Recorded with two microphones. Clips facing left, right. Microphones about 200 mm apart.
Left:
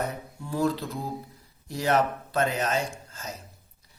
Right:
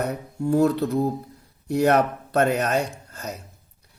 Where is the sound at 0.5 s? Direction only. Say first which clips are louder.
Right 7 dB; 65° right (ahead or behind).